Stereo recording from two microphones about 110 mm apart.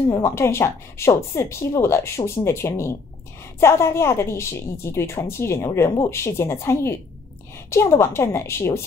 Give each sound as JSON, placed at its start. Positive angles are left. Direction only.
{"t": 0.1, "sound": "speech", "side_deg": 25}